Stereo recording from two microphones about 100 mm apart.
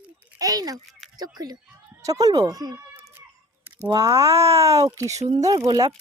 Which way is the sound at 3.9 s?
35° right (ahead or behind).